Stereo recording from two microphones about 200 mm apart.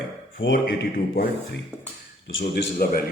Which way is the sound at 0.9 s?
50° left (ahead or behind).